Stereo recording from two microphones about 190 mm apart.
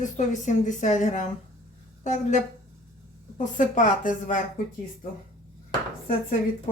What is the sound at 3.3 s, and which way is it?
A woman's voice, 40° left (ahead or behind).